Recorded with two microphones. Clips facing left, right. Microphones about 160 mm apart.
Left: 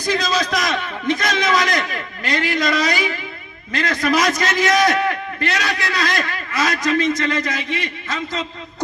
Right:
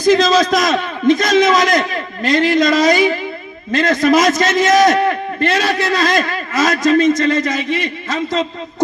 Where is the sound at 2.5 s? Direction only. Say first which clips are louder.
Right 6 dB; 25° right (ahead or behind).